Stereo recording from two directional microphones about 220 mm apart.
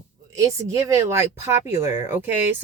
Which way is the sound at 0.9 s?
10° right (ahead or behind).